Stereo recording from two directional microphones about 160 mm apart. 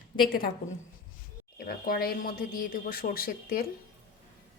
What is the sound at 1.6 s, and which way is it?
Speech, 70° left (ahead or behind).